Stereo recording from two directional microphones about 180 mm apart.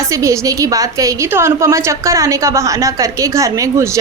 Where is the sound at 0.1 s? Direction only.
15° right (ahead or behind).